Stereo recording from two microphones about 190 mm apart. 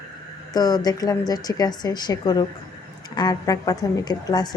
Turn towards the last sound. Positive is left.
turn(degrees=20)  # may be behind; listen again after turning